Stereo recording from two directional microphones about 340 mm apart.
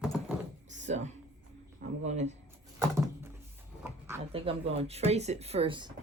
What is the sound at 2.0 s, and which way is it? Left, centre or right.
Speech, centre.